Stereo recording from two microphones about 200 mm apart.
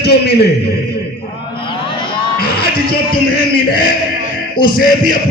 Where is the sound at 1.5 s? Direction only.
25° left (ahead or behind).